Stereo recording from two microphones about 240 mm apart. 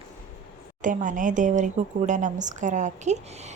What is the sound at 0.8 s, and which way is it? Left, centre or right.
Speech, right.